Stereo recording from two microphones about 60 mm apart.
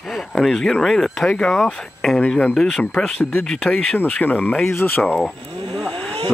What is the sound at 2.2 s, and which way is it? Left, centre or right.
Speech, left.